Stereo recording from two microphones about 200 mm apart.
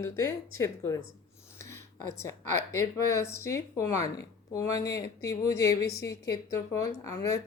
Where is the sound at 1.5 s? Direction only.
15° left (ahead or behind).